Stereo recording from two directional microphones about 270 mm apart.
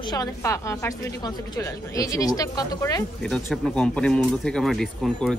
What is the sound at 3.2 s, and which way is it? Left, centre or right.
Speech, centre.